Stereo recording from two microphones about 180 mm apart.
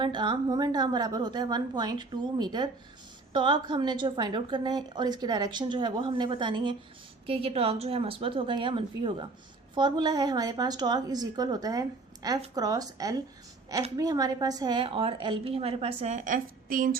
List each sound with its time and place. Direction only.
0.0 s a woman's voice: 25° right (ahead or behind); by 17.0 s 50° right (ahead or behind)